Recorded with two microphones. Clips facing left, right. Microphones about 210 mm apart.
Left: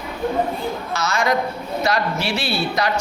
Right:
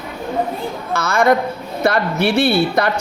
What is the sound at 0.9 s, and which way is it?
A woman's voice, 55° right (ahead or behind).